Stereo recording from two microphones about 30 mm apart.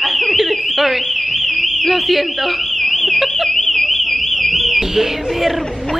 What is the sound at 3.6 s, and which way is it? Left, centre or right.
Alarm, centre.